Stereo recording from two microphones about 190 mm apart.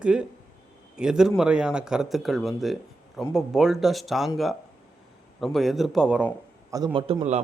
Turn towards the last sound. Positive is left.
turn(degrees=-30)  # may be behind; listen again after turning